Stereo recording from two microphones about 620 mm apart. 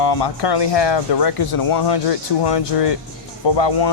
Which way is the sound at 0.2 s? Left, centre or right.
Left.